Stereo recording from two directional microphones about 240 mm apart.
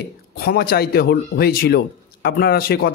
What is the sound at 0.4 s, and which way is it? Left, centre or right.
Speech, left.